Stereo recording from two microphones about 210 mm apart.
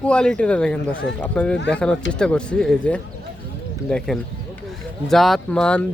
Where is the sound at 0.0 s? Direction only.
5° left (ahead or behind).